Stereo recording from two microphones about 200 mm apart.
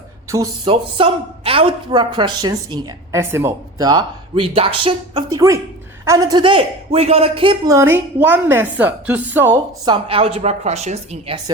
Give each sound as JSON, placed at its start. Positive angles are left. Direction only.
{"t": 0.3, "sound": "speech", "side_deg": -15}
{"t": 0.6, "sound": "a woman's voice", "side_deg": -25}
{"t": 7.7, "sound": "a woman's voice", "side_deg": -10}
{"t": 9.8, "sound": "a woman's voice", "side_deg": -25}